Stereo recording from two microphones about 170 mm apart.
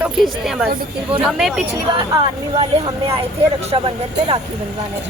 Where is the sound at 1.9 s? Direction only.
30° right (ahead or behind).